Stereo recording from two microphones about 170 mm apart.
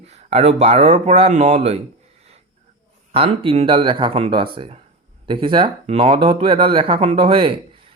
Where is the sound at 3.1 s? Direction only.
35° right (ahead or behind).